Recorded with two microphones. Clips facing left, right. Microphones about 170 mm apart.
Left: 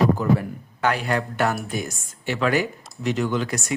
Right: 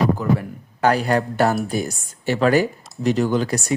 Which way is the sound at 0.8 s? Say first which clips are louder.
Right 5 dB; 40° right (ahead or behind).